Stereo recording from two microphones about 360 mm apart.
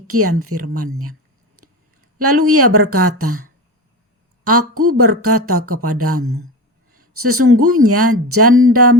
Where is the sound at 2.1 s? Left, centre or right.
Right.